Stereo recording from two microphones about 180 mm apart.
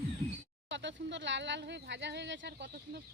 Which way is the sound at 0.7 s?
80° right.